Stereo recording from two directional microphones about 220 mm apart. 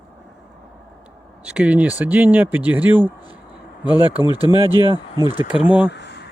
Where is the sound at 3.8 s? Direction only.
20° left (ahead or behind).